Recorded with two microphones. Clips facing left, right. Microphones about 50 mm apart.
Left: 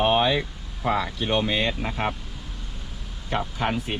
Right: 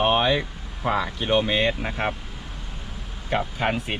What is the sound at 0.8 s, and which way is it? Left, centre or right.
Speech, centre.